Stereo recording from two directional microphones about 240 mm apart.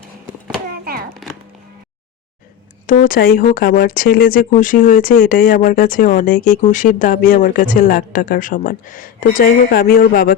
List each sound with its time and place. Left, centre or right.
2.8 s speech: left